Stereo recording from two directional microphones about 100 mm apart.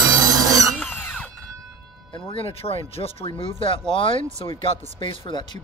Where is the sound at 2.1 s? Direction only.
60° left (ahead or behind).